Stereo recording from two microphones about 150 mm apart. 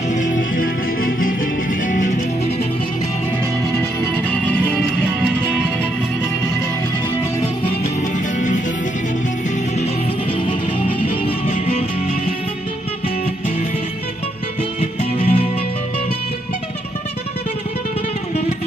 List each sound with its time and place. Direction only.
0.1 s music: 60° left (ahead or behind)
1.9 s music: 60° left (ahead or behind)
4.5 s music: 10° left (ahead or behind)
11.4 s music: 40° left (ahead or behind)
14.8 s music: 40° left (ahead or behind)